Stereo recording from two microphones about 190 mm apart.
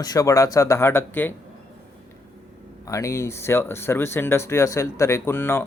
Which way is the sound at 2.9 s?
15° left (ahead or behind).